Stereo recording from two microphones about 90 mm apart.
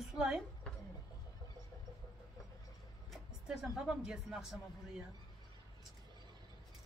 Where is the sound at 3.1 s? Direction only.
5° right (ahead or behind).